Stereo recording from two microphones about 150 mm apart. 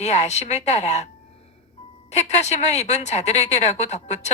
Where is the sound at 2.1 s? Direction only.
50° left (ahead or behind).